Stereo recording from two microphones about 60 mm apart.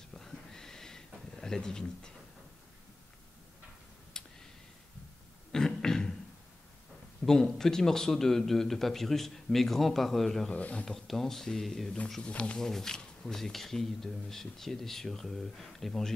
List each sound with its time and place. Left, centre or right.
0.1 s a sound: centre
4.1 s a sound: centre
5.5 s cough: centre
7.2 s speech: centre
10.5 s speech: left
10.9 s speech: centre
12.2 s speech: centre